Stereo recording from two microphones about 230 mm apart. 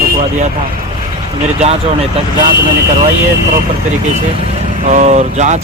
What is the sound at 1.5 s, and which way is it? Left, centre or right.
Speech, right.